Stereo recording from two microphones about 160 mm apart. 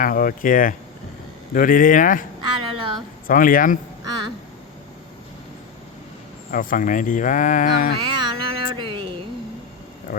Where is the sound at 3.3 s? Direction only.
60° left (ahead or behind).